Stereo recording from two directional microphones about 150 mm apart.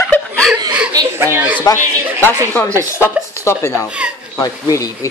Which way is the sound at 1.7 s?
25° left (ahead or behind).